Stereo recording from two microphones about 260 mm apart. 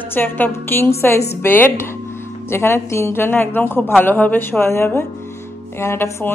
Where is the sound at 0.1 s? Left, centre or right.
Centre.